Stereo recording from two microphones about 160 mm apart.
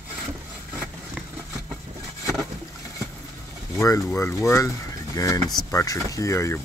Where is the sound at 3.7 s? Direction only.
20° left (ahead or behind).